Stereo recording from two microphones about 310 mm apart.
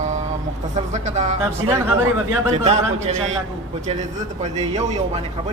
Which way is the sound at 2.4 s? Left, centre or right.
Centre.